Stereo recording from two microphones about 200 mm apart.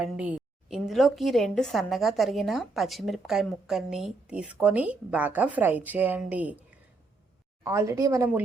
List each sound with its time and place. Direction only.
0.0 s a woman's voice: 5° right (ahead or behind)
7.6 s speech: 15° right (ahead or behind)